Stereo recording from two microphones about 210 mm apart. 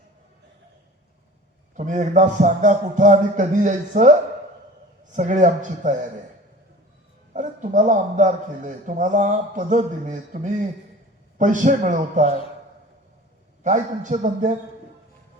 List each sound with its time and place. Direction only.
1.7 s a man's voice: 35° right (ahead or behind)
5.1 s a man's voice: 35° right (ahead or behind)
7.3 s a man's voice: 35° right (ahead or behind)
13.7 s a man's voice: 35° right (ahead or behind)